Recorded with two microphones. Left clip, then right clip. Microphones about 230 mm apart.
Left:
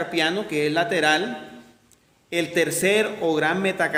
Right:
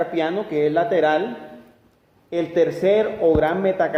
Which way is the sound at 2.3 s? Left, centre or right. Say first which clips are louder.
Right 3 dB; left.